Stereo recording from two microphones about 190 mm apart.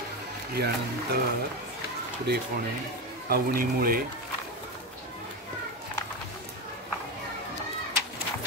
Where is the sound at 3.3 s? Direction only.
50° right (ahead or behind).